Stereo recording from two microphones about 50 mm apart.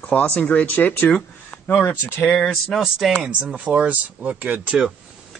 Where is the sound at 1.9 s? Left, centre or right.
Left.